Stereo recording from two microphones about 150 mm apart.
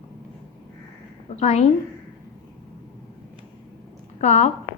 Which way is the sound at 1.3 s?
50° left (ahead or behind).